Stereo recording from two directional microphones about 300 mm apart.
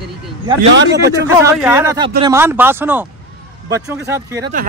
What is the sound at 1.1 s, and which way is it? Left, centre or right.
Speech, centre.